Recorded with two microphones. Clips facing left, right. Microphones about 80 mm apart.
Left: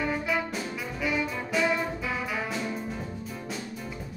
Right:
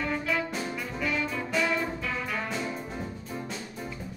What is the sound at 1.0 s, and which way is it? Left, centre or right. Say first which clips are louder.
Brass instrument: left 1 dB; centre.